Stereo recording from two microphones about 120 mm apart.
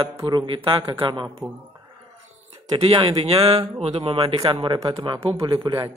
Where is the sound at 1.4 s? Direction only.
20° right (ahead or behind).